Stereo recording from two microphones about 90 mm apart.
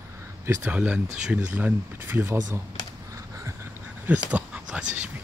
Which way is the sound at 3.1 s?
35° right (ahead or behind).